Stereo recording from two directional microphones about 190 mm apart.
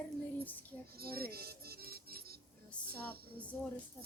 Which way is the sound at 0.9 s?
55° right (ahead or behind).